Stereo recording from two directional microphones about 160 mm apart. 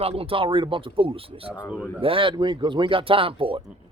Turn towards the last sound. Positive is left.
turn(degrees=-35)  # may be behind; listen again after turning